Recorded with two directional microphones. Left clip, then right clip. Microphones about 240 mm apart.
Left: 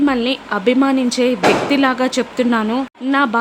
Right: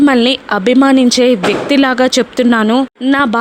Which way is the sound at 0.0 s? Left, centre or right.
Right.